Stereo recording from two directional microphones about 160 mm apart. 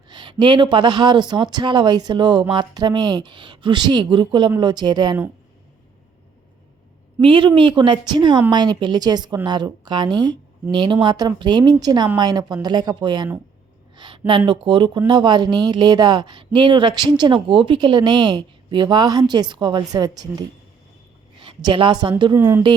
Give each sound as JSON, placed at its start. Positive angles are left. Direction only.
{"t": 0.1, "sound": "a woman's voice", "side_deg": -30}
{"t": 7.2, "sound": "a woman's voice", "side_deg": -35}
{"t": 21.4, "sound": "a woman's voice", "side_deg": -30}
{"t": 22.4, "sound": "speech", "side_deg": -15}